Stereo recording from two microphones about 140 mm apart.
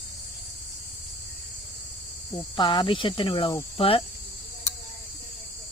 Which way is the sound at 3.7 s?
40° left (ahead or behind).